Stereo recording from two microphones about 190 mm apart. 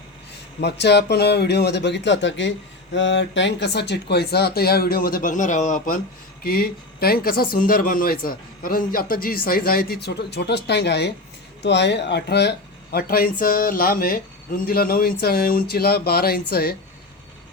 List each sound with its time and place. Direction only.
0.6 s speech: 60° left (ahead or behind)